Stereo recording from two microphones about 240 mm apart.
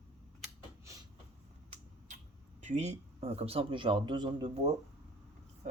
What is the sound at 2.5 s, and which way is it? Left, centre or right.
Speech, right.